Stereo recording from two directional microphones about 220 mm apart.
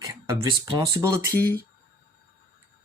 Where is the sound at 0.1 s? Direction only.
15° right (ahead or behind).